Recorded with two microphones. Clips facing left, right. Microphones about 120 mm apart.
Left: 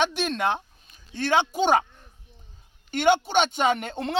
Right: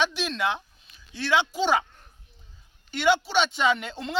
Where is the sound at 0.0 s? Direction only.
55° left (ahead or behind).